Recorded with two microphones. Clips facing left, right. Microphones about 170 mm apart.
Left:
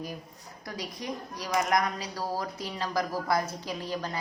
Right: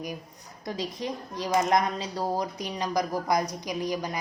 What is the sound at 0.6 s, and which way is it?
A woman's voice, 25° right (ahead or behind).